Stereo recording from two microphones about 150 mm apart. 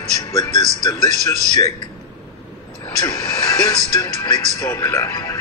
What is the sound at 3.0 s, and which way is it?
A man's voice, 20° left (ahead or behind).